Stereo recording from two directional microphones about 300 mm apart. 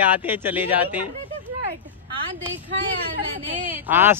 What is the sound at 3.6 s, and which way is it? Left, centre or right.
Speech, centre.